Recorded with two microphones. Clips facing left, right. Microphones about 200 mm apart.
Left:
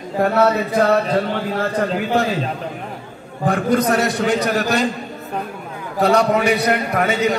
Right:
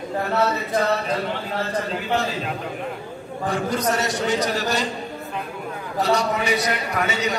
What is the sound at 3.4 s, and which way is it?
A man's voice, 60° left (ahead or behind).